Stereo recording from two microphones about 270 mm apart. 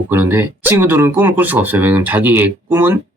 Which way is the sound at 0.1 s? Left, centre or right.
Centre.